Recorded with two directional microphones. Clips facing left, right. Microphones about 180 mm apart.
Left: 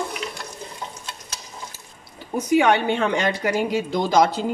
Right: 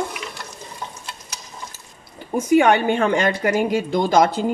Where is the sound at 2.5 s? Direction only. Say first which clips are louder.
Right 3 dB; 50° right (ahead or behind).